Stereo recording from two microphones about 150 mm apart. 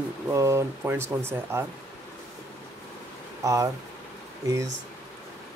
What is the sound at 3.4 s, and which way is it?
Speech, 20° right (ahead or behind).